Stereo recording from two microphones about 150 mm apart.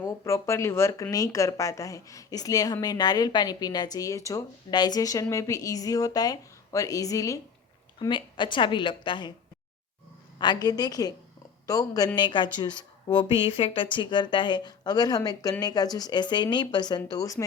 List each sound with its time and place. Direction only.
0.0 s a woman's voice: 20° left (ahead or behind)
10.3 s a woman's voice: 30° left (ahead or behind)